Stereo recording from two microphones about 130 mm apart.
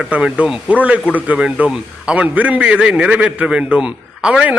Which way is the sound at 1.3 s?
5° right (ahead or behind).